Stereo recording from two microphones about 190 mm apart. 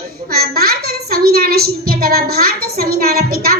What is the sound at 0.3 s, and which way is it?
A child's voice, 55° right (ahead or behind).